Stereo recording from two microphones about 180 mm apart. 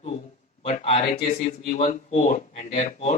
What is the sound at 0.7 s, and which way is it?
Speech, 35° left (ahead or behind).